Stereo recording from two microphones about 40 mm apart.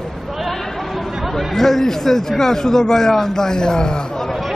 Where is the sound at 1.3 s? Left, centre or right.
Centre.